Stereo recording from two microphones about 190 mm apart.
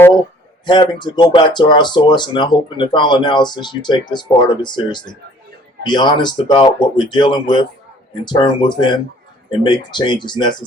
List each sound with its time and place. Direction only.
0.6 s speech: 25° left (ahead or behind)